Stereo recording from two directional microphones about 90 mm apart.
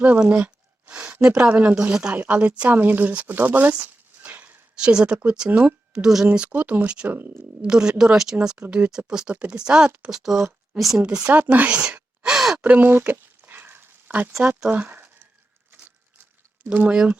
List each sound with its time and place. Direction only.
0.0 s speech: 15° right (ahead or behind)
7.2 s speech: 25° right (ahead or behind)
7.6 s speech: 10° right (ahead or behind)
12.5 s a sound: 15° right (ahead or behind)
14.4 s speech: 15° right (ahead or behind)
16.6 s speech: 15° right (ahead or behind)